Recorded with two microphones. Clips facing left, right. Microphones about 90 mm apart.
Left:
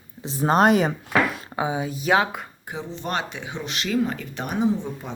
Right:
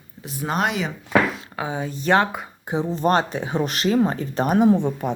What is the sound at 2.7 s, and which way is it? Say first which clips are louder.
Speech: right 9 dB; 40° right (ahead or behind).